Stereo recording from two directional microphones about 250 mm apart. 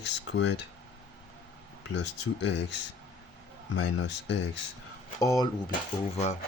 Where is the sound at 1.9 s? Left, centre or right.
Left.